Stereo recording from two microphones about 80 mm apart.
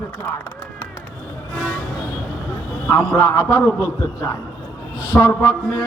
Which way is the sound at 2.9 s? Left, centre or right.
Left.